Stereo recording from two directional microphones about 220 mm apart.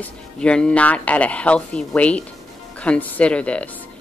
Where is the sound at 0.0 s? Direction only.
5° left (ahead or behind).